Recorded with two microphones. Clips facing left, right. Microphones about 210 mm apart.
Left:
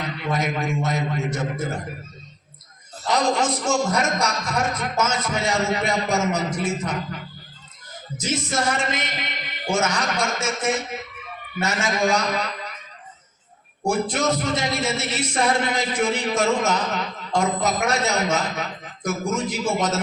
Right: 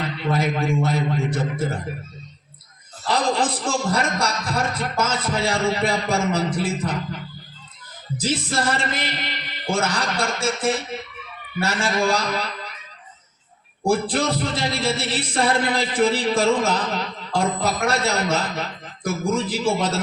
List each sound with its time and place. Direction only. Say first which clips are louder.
0.2 s a man's voice: right 3 dB; 30° right (ahead or behind)
3.1 s a man's voice: even; 30° right (ahead or behind)
8.2 s a man's voice: right 1 dB; 30° right (ahead or behind)
13.8 s a man's voice: right 1 dB; 30° right (ahead or behind)